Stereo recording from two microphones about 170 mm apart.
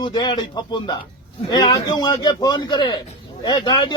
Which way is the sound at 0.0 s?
25° left (ahead or behind).